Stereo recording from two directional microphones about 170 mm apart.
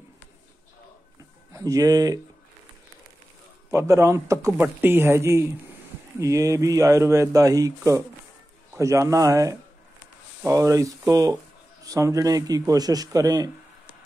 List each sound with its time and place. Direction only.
1.5 s speech: 20° right (ahead or behind)
3.7 s speech: 20° right (ahead or behind)